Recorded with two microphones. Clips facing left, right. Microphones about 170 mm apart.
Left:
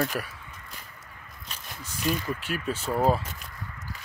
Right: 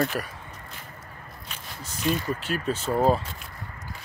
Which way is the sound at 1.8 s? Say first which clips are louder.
Right 2 dB; 40° right (ahead or behind).